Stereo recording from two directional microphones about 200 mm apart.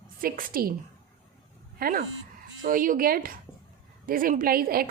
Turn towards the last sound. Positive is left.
turn(degrees=-50)  # may be behind; listen again after turning